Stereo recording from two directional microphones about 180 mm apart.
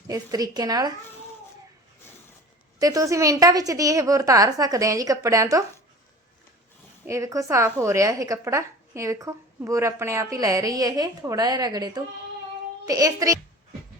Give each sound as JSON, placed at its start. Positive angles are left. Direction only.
{"t": 0.1, "sound": "a woman's voice", "side_deg": -20}
{"t": 2.7, "sound": "a woman's voice", "side_deg": -20}
{"t": 7.1, "sound": "a woman's voice", "side_deg": -15}